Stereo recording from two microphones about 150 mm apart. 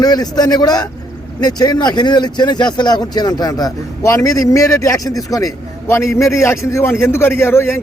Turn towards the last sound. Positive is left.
turn(degrees=15)  # may be behind; listen again after turning